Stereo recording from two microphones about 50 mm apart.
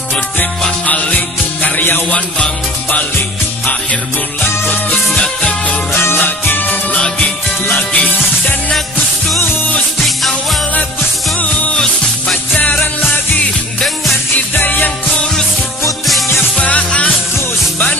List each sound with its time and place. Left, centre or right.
0.8 s music: left
2.0 s music: left
3.6 s music: left
5.9 s music: left
10.0 s jingle bell: centre
11.3 s music: left
16.5 s music: left